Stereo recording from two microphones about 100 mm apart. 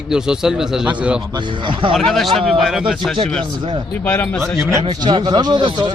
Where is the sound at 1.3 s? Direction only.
55° right (ahead or behind).